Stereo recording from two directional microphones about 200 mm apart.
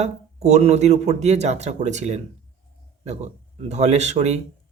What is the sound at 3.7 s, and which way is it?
Speech, 35° right (ahead or behind).